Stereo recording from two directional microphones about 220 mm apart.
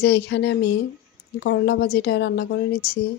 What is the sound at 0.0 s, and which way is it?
A woman's voice, 50° left (ahead or behind).